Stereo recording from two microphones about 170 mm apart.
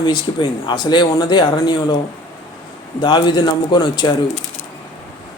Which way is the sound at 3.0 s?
25° left (ahead or behind).